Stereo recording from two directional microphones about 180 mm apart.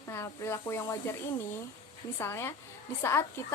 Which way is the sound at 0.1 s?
15° left (ahead or behind).